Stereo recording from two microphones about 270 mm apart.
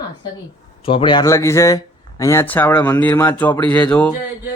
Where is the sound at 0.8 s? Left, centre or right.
Centre.